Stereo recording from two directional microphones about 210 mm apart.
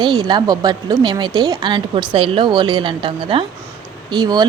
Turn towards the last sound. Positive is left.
turn(degrees=-20)  # may be behind; listen again after turning